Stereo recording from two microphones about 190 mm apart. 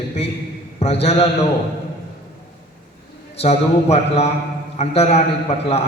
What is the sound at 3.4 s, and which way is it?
A man's voice, 35° left (ahead or behind).